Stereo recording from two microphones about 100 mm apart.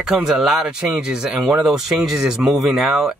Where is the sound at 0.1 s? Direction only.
5° right (ahead or behind).